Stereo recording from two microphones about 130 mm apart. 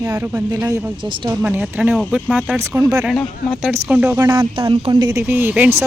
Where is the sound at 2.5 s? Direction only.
20° right (ahead or behind).